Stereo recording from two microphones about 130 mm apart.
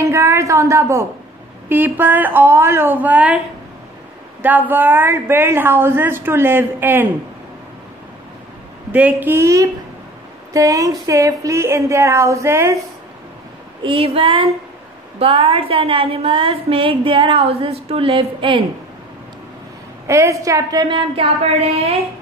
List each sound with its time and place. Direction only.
0.0 s a woman's voice: 20° right (ahead or behind)
4.4 s a woman's voice: 15° right (ahead or behind)
8.9 s a woman's voice: 15° right (ahead or behind)
13.8 s a woman's voice: 45° right (ahead or behind)
20.1 s speech: 20° right (ahead or behind)
21.7 s a woman's voice: 50° right (ahead or behind)